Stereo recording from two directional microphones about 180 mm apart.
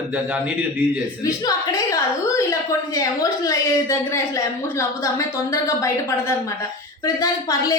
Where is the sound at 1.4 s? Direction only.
20° left (ahead or behind).